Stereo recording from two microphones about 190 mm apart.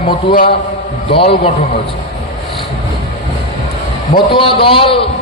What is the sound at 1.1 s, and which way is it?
Speech, 30° left (ahead or behind).